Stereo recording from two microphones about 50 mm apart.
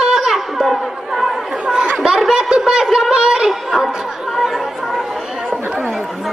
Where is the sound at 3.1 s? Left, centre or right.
Centre.